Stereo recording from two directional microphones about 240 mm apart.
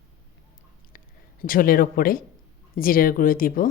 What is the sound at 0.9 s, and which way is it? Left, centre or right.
Speech, left.